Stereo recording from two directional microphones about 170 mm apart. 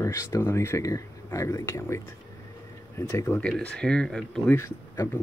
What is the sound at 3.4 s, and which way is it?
Speech, 5° left (ahead or behind).